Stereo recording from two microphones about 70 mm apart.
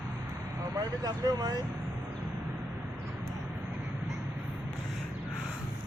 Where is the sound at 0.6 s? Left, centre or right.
Right.